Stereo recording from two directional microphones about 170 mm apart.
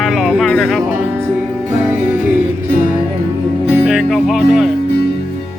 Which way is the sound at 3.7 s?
5° right (ahead or behind).